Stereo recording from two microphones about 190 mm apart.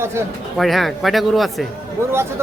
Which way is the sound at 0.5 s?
Centre (ahead or behind).